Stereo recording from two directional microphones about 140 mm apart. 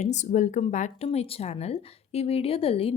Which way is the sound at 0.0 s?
60° left (ahead or behind).